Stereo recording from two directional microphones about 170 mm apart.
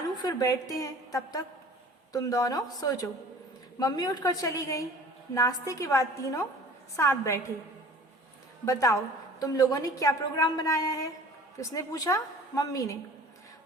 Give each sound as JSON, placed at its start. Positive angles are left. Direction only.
{"t": 0.1, "sound": "a woman's voice", "side_deg": 25}
{"t": 8.6, "sound": "a woman's voice", "side_deg": 20}